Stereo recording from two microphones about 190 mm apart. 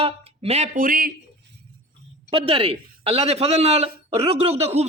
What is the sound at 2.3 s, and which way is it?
A man's voice, 30° right (ahead or behind).